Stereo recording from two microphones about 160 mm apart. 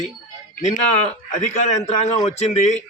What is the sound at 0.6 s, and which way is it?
Speech, 45° left (ahead or behind).